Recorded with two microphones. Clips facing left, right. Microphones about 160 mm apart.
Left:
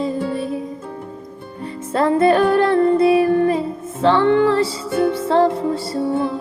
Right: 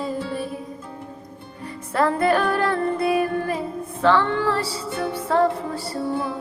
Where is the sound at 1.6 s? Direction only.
25° left (ahead or behind).